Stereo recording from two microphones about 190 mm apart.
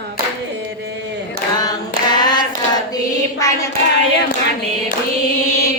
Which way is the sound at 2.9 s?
15° left (ahead or behind).